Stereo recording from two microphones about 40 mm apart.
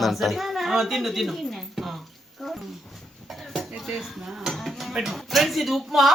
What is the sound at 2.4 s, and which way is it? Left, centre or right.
Dog, centre.